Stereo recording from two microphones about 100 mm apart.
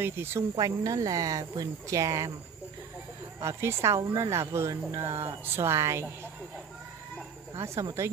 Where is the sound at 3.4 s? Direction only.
25° right (ahead or behind).